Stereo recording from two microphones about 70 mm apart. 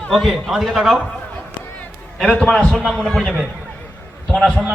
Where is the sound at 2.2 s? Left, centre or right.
Centre.